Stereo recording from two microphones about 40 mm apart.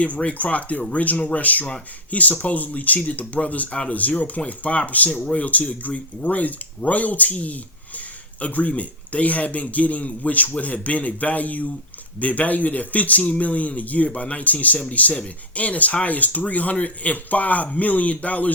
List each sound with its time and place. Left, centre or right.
0.0 s speech: left